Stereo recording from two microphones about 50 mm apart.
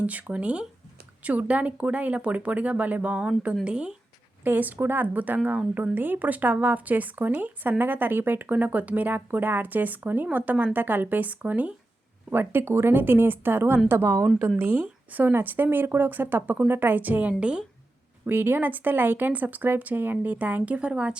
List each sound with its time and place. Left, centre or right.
0.0 s speech: right
4.4 s speech: right
12.3 s speech: right
18.3 s speech: right
20.7 s speech: right